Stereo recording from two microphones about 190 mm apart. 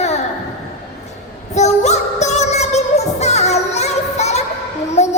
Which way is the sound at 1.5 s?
35° left (ahead or behind).